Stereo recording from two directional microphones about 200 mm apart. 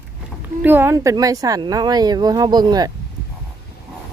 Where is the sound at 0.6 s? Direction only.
10° right (ahead or behind).